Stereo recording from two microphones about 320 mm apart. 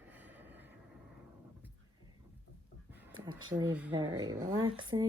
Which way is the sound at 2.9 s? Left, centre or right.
Centre.